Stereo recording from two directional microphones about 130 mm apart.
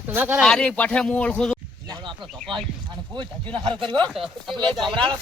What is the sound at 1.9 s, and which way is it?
Speech, 40° right (ahead or behind).